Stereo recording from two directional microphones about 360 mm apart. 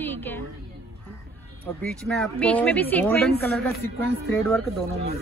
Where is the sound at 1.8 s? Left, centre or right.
Centre.